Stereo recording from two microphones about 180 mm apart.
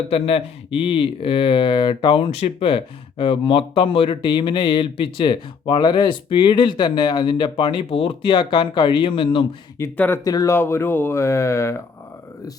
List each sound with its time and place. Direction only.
0.1 s speech: 30° left (ahead or behind)
9.7 s speech: 15° left (ahead or behind)